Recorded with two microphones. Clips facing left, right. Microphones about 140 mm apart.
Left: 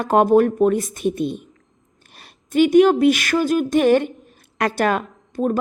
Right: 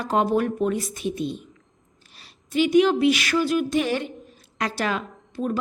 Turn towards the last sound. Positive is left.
turn(degrees=45)  # may be behind; listen again after turning